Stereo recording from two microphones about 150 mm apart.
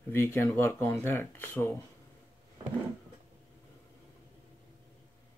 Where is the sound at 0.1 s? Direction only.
15° left (ahead or behind).